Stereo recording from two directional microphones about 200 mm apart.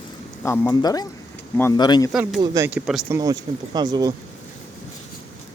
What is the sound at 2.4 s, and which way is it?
Speech, 15° right (ahead or behind).